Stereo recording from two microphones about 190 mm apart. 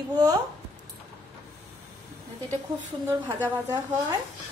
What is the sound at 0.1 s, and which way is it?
Speech, 20° right (ahead or behind).